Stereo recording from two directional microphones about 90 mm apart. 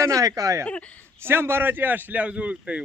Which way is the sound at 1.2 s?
25° right (ahead or behind).